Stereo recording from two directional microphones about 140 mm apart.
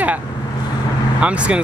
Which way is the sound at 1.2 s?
10° right (ahead or behind).